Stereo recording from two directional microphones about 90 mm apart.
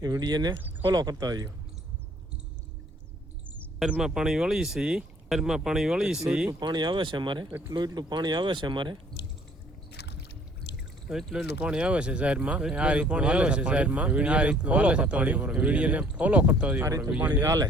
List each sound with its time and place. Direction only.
0.0 s speech: 45° right (ahead or behind)
3.8 s speech: 10° right (ahead or behind)
6.5 s speech: 55° right (ahead or behind)
11.1 s speech: 5° right (ahead or behind)
17.4 s speech: 40° right (ahead or behind)